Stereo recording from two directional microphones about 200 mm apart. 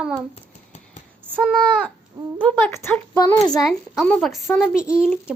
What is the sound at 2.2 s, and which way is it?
Speech, 15° right (ahead or behind).